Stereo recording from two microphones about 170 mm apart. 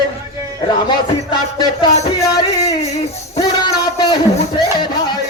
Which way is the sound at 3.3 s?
25° left (ahead or behind).